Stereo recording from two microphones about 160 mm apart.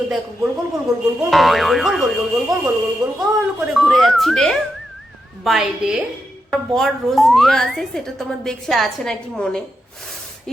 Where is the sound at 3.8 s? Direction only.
Centre (ahead or behind).